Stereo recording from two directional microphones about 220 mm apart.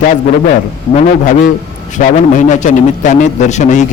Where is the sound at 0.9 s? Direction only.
35° left (ahead or behind).